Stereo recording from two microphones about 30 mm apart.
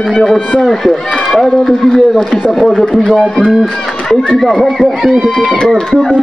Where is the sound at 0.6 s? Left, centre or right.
Centre.